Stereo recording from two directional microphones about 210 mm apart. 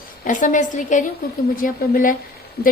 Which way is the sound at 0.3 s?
35° left (ahead or behind).